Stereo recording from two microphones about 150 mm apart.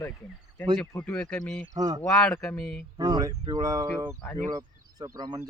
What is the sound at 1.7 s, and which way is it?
Speech, 25° right (ahead or behind).